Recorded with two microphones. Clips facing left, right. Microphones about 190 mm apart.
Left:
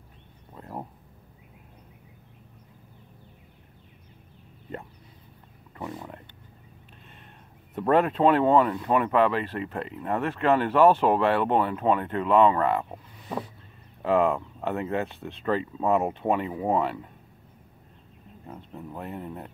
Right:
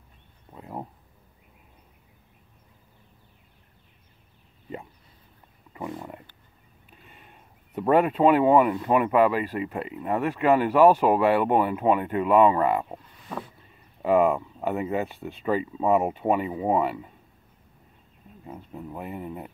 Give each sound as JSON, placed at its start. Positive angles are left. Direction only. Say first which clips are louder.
{"t": 0.6, "sound": "a sound", "louder": "right 1 dB", "side_deg": -5}
{"t": 5.9, "sound": "wild animals", "louder": "right 2 dB", "side_deg": -5}
{"t": 7.7, "sound": "speech", "louder": "right 1 dB", "side_deg": -5}
{"t": 14.0, "sound": "speech", "louder": "right 2 dB", "side_deg": -5}
{"t": 18.5, "sound": "speech", "louder": "right 2 dB", "side_deg": -5}